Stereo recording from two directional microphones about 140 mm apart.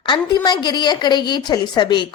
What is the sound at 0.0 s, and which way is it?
A woman's voice, 30° left (ahead or behind).